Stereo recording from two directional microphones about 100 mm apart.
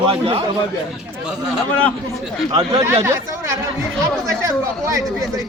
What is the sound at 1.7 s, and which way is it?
Speech, 10° left (ahead or behind).